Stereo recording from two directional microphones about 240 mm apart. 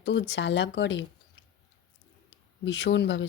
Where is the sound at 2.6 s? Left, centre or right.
Left.